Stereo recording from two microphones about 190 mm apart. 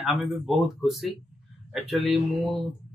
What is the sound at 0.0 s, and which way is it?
Speech, centre (ahead or behind).